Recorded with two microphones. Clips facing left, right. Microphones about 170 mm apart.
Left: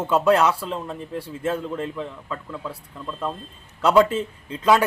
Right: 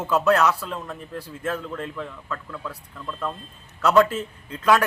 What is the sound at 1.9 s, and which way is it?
Speech, 20° left (ahead or behind).